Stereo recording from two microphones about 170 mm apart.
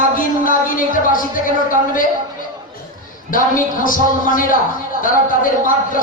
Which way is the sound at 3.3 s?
55° left (ahead or behind).